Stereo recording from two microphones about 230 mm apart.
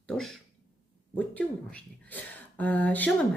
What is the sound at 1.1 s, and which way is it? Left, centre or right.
Speech, centre.